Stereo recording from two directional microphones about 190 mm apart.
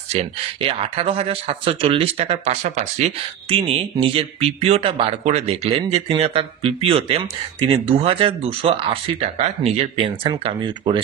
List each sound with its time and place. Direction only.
0.1 s speech: 30° right (ahead or behind)